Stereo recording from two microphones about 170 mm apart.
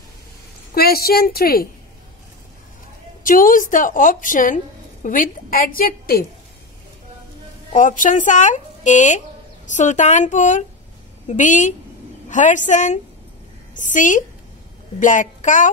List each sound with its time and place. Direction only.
0.7 s a woman's voice: 65° left (ahead or behind)
3.3 s a woman's voice: 55° left (ahead or behind)
7.7 s speech: 50° left (ahead or behind)